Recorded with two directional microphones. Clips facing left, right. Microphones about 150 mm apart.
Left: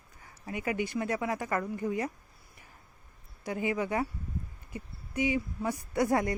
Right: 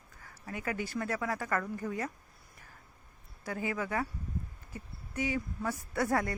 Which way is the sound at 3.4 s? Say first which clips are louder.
Left 4 dB; 15° left (ahead or behind).